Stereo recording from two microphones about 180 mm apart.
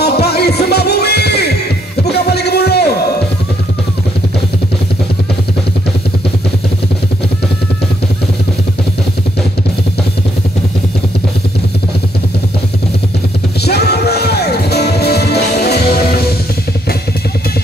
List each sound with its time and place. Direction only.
0.0 s music: 65° left (ahead or behind)
2.0 s a sound: 65° left (ahead or behind)
13.7 s music: 65° left (ahead or behind)